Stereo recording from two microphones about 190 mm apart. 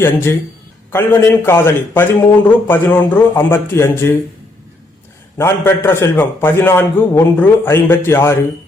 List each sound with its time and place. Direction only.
0.0 s a man's voice: 10° left (ahead or behind)
5.4 s a man's voice: 10° left (ahead or behind)